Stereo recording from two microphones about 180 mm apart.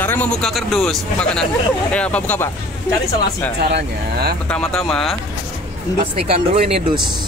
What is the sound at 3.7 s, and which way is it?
Speech, 65° right (ahead or behind).